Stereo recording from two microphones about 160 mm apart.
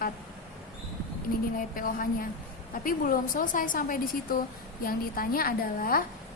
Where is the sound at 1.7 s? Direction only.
60° left (ahead or behind).